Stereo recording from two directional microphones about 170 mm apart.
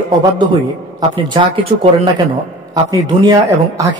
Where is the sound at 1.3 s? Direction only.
30° right (ahead or behind).